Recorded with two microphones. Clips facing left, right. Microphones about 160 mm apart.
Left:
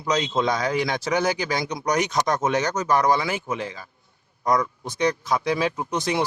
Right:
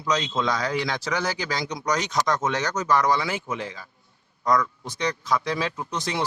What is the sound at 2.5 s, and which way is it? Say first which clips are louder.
Speech: left 2 dB; 15° left (ahead or behind).